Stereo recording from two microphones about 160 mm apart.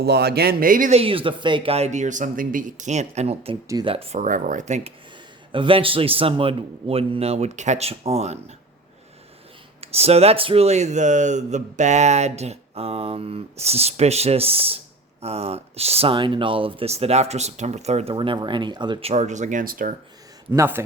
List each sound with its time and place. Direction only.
0.0 s speech: 85° right; by 0.9 s 55° right (ahead or behind)
0.9 s speech: 35° right (ahead or behind)
4.2 s speech: 55° right (ahead or behind)
5.5 s speech: 30° right (ahead or behind)
9.8 s speech: 40° right (ahead or behind); by 19.9 s 60° right (ahead or behind)
20.5 s a man's voice: 15° right (ahead or behind)